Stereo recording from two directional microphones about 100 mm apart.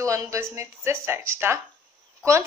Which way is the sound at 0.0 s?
30° right (ahead or behind).